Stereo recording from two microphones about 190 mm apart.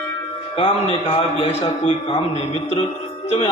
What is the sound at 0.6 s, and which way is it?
A man's voice, 35° left (ahead or behind).